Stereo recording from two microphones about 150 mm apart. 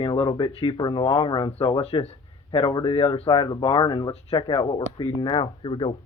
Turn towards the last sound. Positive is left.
turn(degrees=35)  # may be behind; listen again after turning